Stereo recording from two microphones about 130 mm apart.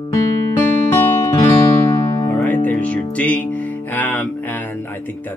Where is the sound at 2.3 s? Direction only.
15° left (ahead or behind).